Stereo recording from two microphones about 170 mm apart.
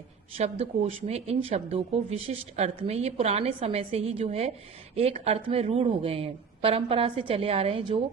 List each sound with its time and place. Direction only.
0.3 s speech: 35° right (ahead or behind)